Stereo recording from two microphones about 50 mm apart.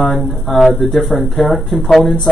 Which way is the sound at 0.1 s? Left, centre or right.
Centre.